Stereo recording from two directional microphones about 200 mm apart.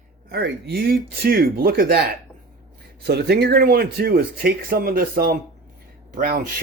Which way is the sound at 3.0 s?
55° right (ahead or behind).